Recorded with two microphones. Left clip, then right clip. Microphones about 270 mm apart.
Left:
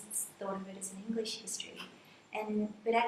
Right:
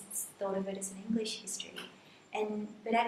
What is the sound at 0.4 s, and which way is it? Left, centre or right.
A woman's voice, centre.